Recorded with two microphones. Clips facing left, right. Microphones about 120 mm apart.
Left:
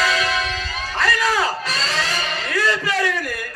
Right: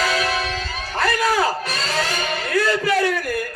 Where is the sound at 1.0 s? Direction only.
45° right (ahead or behind).